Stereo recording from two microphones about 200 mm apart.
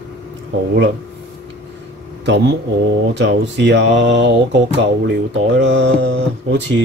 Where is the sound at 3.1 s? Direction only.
60° right (ahead or behind).